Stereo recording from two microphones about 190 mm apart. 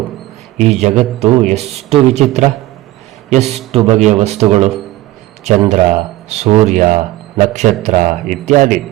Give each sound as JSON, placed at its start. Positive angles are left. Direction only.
{"t": 0.8, "sound": "speech", "side_deg": -35}
{"t": 3.2, "sound": "speech", "side_deg": -35}